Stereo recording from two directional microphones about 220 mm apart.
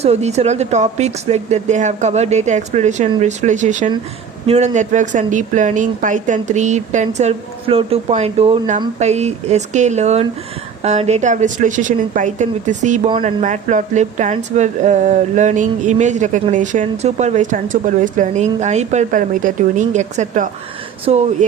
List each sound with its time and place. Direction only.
0.0 s speech: 30° right (ahead or behind)
13.1 s speech: 25° right (ahead or behind)
13.4 s speech: 35° right (ahead or behind)